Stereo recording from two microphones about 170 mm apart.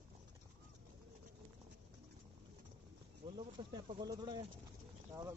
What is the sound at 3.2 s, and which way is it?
Speech, 30° right (ahead or behind).